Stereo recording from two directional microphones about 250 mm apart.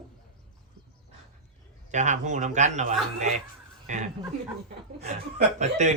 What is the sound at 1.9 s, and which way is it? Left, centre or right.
Speech, right.